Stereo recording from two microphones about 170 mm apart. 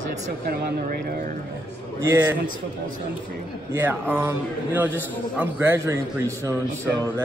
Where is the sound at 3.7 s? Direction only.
10° right (ahead or behind).